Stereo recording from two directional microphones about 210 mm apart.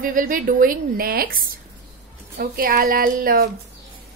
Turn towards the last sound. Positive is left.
turn(degrees=-45)  # may be behind; listen again after turning